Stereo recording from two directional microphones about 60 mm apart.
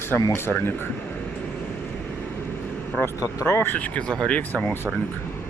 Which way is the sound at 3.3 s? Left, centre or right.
Left.